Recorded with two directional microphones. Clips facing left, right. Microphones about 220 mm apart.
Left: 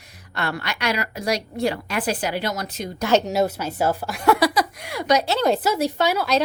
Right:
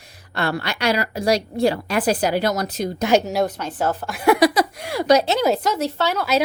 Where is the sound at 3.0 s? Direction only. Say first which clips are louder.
Right 1 dB; 10° right (ahead or behind).